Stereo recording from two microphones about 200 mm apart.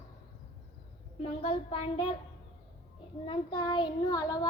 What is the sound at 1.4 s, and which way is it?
Child singing, 25° left (ahead or behind).